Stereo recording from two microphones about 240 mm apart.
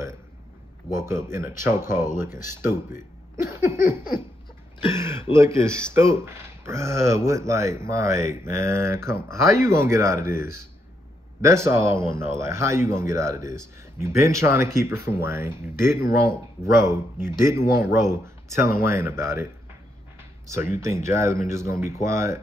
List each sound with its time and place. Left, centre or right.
0.9 s speech: centre
3.4 s a sound: centre
4.9 s throat clearing: centre
5.3 s speech: centre
17.6 s speech: left
18.1 s speech: centre
20.4 s speech: centre